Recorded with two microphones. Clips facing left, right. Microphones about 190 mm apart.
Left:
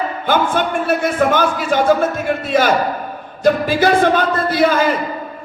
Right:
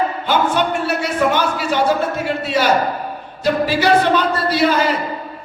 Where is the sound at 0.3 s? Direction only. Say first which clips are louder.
Left 2 dB; 50° left (ahead or behind).